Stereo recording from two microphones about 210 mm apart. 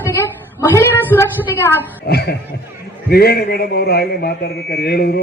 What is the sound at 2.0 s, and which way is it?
A man's voice, 50° left (ahead or behind).